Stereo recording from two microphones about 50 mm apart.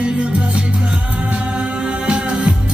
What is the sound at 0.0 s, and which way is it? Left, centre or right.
Music, right.